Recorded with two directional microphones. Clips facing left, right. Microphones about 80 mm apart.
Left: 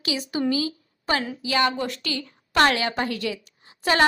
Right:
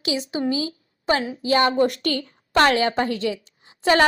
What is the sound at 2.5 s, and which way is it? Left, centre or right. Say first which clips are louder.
Speech: right 3 dB; right.